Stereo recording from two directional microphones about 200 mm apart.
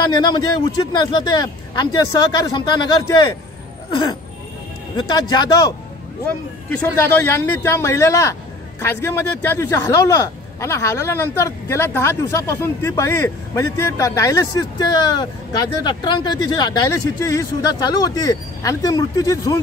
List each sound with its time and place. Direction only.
0.2 s speech: 20° left (ahead or behind)
4.9 s speech: 20° left (ahead or behind)
6.2 s speech: 10° left (ahead or behind)